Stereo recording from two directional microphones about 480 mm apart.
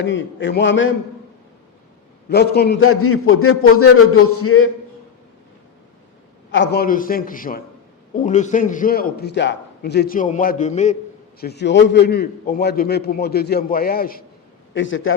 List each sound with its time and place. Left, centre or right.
0.0 s a man's voice: left
2.3 s a man's voice: centre
6.5 s a man's voice: left